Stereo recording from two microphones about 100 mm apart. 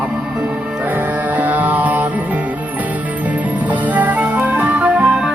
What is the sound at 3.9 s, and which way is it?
Music, 15° right (ahead or behind).